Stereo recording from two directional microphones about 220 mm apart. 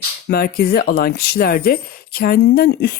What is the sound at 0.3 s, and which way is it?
Speech, 45° left (ahead or behind).